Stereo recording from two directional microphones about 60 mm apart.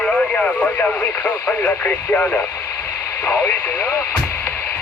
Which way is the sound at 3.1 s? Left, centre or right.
Left.